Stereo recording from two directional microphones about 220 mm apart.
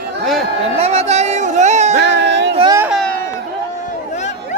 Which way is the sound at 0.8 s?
30° right (ahead or behind).